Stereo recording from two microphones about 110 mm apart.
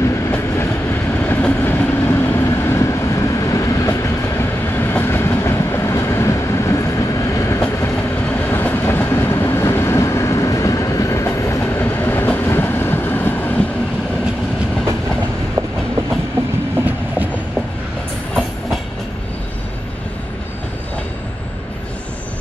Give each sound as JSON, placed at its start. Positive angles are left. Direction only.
{"t": 0.0, "sound": "train", "side_deg": 25}
{"t": 8.3, "sound": "train", "side_deg": 15}